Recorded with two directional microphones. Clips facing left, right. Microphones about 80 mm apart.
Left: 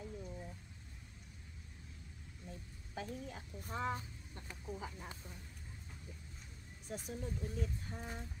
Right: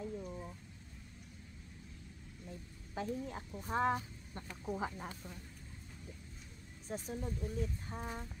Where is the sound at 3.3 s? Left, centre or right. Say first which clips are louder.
Right 5 dB; right.